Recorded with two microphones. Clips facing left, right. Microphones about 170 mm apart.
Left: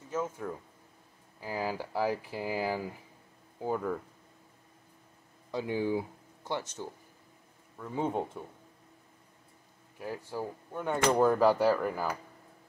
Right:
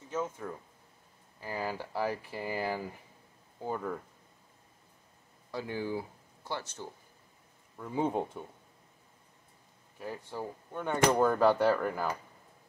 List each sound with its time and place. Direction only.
0.1 s speech: 5° left (ahead or behind)
5.5 s speech: 20° left (ahead or behind)
7.7 s speech: 5° right (ahead or behind)
9.9 s speech: 5° left (ahead or behind)